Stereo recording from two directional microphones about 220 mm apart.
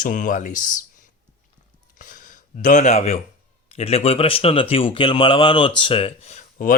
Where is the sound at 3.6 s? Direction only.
25° left (ahead or behind).